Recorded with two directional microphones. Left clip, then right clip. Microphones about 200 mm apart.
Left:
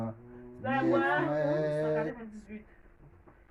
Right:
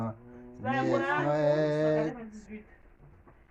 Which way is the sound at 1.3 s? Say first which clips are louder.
Right 3 dB; 20° right (ahead or behind).